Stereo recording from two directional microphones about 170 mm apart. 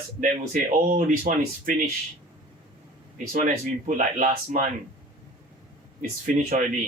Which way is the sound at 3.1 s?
50° right (ahead or behind).